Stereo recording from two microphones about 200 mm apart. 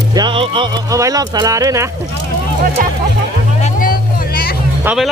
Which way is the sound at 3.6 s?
45° left (ahead or behind).